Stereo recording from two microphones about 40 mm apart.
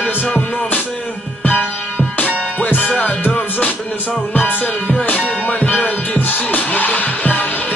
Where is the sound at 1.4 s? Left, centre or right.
Left.